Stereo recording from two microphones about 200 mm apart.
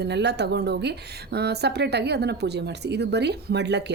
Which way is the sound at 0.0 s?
60° right (ahead or behind).